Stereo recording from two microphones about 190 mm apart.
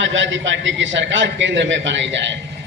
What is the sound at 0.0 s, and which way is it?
A man's voice, 80° right.